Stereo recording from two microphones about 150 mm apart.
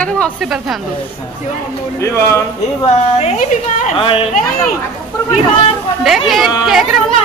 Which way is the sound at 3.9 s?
35° left (ahead or behind).